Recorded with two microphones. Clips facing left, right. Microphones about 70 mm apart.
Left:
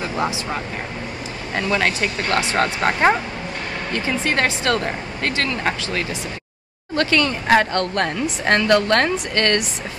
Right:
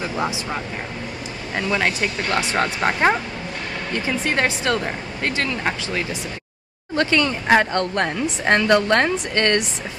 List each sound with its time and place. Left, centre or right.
1.5 s speech: centre
2.9 s speech: centre
3.9 s speech: centre